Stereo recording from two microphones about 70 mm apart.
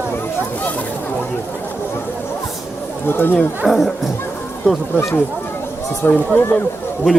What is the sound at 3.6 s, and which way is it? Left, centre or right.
Speech, centre.